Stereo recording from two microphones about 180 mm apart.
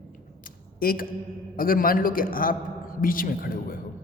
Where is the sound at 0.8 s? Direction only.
55° left (ahead or behind).